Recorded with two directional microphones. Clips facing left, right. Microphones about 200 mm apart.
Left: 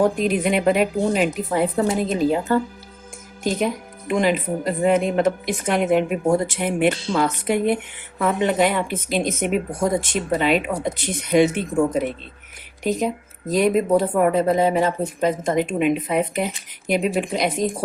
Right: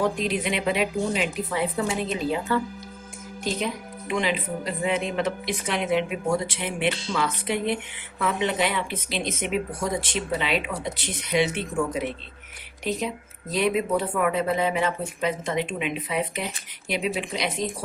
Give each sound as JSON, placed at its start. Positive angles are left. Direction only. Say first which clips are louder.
{"t": 0.0, "sound": "speech", "louder": "left 6 dB", "side_deg": 50}